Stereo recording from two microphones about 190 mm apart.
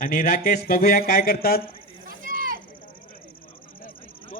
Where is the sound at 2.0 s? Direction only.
50° right (ahead or behind).